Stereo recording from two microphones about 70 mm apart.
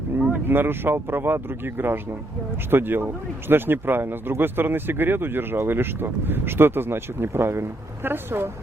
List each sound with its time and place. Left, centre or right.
0.2 s speech: right